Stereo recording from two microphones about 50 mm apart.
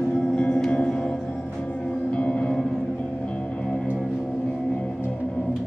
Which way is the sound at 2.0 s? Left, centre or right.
Left.